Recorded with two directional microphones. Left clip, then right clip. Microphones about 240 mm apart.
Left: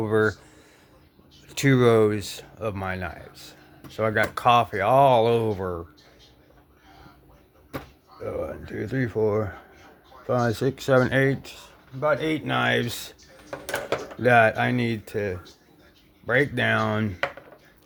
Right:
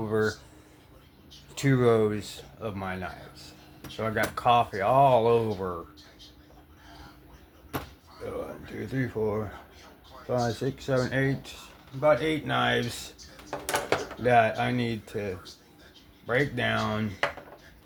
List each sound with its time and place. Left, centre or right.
0.0 s speech: left
1.5 s speech: left
8.6 s speech: left
14.2 s speech: left